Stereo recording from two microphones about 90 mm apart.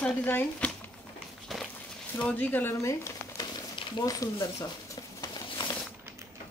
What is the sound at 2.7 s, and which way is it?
Speech, 30° left (ahead or behind).